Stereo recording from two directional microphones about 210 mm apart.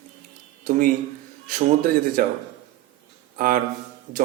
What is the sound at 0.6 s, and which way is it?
Speech, 40° right (ahead or behind).